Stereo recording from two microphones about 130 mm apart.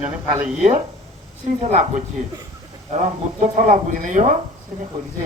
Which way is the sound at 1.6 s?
65° right (ahead or behind).